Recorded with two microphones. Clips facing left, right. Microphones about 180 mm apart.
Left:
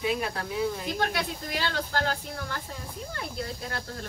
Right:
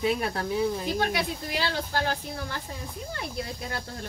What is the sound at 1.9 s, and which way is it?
Speech, 10° right (ahead or behind).